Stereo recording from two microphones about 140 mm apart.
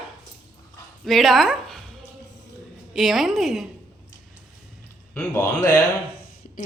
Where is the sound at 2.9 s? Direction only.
Centre (ahead or behind).